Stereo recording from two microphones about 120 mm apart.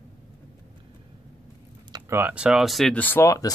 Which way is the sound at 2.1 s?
15° right (ahead or behind).